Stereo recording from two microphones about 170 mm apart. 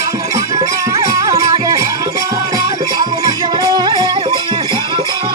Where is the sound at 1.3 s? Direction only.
20° right (ahead or behind).